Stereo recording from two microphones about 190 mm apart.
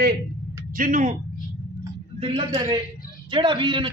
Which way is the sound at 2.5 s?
20° right (ahead or behind).